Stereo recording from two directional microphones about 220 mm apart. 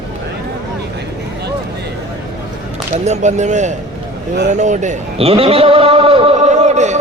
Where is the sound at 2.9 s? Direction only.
30° right (ahead or behind).